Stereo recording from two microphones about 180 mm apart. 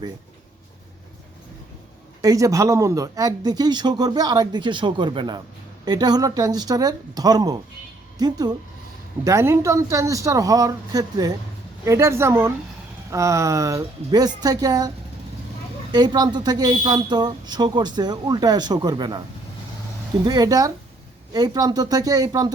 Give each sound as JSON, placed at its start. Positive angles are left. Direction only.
{"t": 2.2, "sound": "speech", "side_deg": -20}
{"t": 20.2, "sound": "speech", "side_deg": -20}